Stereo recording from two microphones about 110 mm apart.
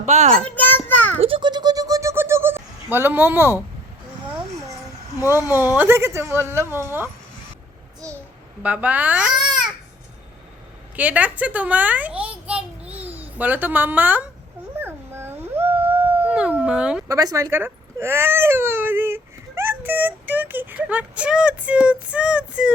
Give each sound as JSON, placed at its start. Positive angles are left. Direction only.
{"t": 0.0, "sound": "a child's voice", "side_deg": -90}
{"t": 0.4, "sound": "a sound", "side_deg": 15}
{"t": 1.2, "sound": "a sound", "side_deg": -50}
{"t": 5.2, "sound": "speech", "side_deg": 30}
{"t": 5.7, "sound": "speech", "side_deg": -20}
{"t": 8.6, "sound": "a woman's voice", "side_deg": -15}
{"t": 10.9, "sound": "a woman's voice", "side_deg": -15}
{"t": 14.8, "sound": "howl", "side_deg": -20}
{"t": 17.1, "sound": "speech", "side_deg": -30}